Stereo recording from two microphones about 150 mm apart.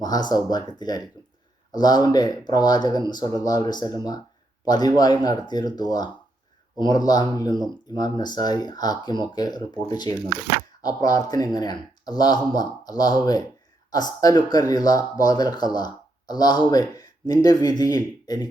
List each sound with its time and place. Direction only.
0.0 s speech: 25° left (ahead or behind)